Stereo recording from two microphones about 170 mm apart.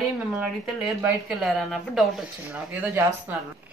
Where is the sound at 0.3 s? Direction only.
5° right (ahead or behind).